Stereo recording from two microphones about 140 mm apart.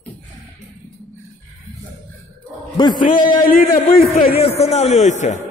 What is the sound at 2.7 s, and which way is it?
Speech, 30° left (ahead or behind).